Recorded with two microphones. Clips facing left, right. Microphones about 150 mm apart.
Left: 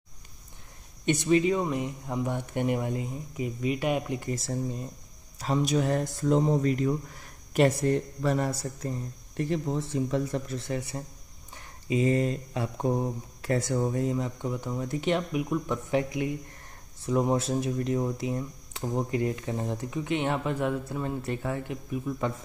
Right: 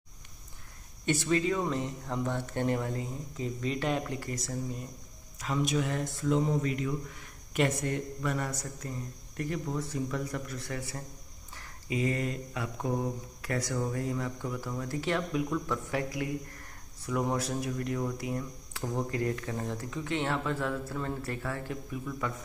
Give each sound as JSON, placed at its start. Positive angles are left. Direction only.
{"t": 1.0, "sound": "speech", "side_deg": 20}